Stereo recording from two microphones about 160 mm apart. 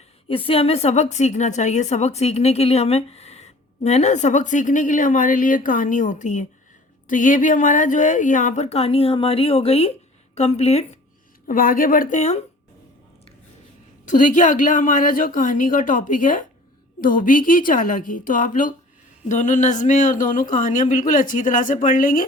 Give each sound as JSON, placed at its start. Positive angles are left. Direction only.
{"t": 0.3, "sound": "a woman's voice", "side_deg": 35}
{"t": 11.4, "sound": "a woman's voice", "side_deg": 60}
{"t": 14.0, "sound": "a woman's voice", "side_deg": 55}